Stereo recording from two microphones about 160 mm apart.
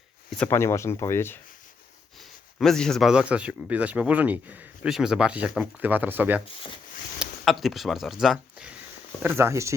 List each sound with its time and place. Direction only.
0.3 s speech: 5° left (ahead or behind)
0.5 s speech: 15° left (ahead or behind)
2.6 s speech: 5° left (ahead or behind)
7.2 s speech: centre (ahead or behind)
9.2 s speech: 15° right (ahead or behind)